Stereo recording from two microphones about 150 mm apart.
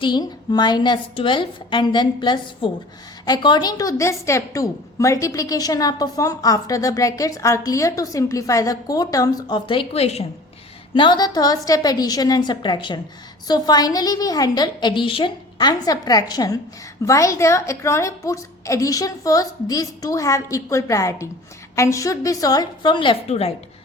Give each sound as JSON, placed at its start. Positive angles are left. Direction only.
{"t": 0.0, "sound": "a woman's voice", "side_deg": 30}
{"t": 10.9, "sound": "a woman's voice", "side_deg": 30}